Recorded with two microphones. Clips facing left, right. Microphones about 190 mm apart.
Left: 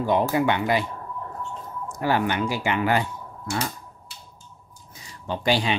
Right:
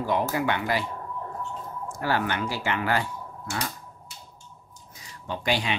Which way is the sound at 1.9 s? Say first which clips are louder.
Left 4 dB; 15° left (ahead or behind).